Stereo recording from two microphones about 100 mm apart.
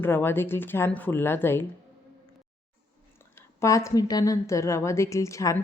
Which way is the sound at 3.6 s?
30° left (ahead or behind).